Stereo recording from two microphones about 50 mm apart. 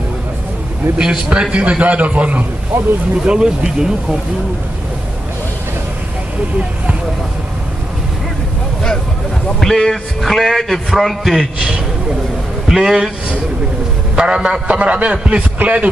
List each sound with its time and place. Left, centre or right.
0.9 s a man's voice: right
9.6 s a man's voice: centre
14.1 s speech: centre
14.7 s a man's voice: right